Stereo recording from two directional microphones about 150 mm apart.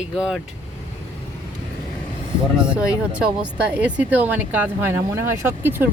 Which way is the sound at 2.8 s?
10° right (ahead or behind).